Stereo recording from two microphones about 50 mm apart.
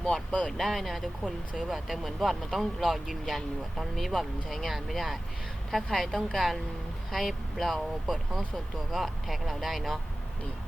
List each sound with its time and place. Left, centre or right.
0.1 s speech: centre
0.5 s speech: centre